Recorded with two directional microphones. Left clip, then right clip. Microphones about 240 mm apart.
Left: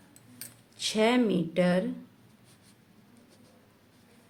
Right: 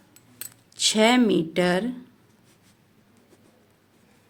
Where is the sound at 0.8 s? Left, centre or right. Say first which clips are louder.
Right 6 dB; right.